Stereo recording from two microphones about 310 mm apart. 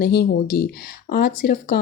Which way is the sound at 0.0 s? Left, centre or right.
Left.